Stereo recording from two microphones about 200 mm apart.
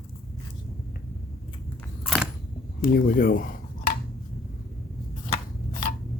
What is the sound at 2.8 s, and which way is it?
Speech, 45° left (ahead or behind).